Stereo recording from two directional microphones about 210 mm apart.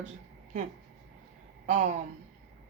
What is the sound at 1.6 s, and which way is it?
Speech, 35° right (ahead or behind).